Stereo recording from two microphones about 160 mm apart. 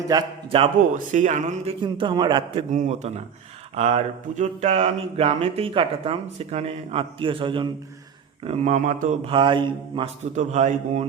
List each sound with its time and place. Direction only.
0.1 s a man's voice: 25° right (ahead or behind)
0.8 s a man's voice: 55° right (ahead or behind)
1.8 s a man's voice: 30° right (ahead or behind)
2.7 s a man's voice: 45° right (ahead or behind)
3.8 s a sound: 40° right (ahead or behind)
8.4 s a man's voice: 45° right (ahead or behind)
9.2 s a sound: 30° right (ahead or behind)
10.3 s a man's voice: 50° right (ahead or behind)